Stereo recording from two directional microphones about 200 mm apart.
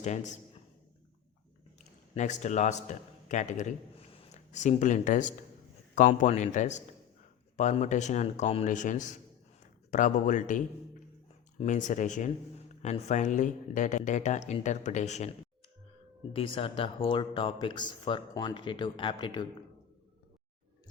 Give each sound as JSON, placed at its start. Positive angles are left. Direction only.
{"t": 0.0, "sound": "speech", "side_deg": 35}
{"t": 1.8, "sound": "a man's voice", "side_deg": 35}
{"t": 16.3, "sound": "speech", "side_deg": 25}